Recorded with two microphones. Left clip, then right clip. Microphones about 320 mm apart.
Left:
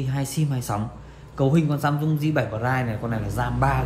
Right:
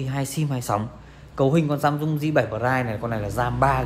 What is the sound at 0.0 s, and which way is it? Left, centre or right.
A man's voice, right.